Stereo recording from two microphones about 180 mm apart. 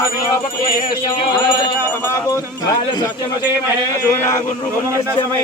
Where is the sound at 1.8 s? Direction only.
15° left (ahead or behind).